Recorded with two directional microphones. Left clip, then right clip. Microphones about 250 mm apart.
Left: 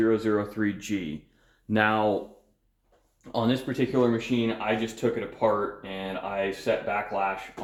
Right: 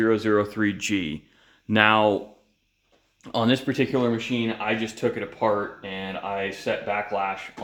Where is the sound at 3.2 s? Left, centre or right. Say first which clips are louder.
Right 4 dB; right.